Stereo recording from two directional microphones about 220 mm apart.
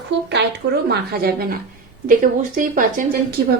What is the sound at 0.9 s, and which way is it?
A woman's voice, 45° right (ahead or behind).